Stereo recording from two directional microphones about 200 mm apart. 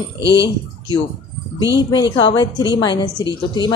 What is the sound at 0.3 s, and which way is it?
A woman's voice, 20° left (ahead or behind).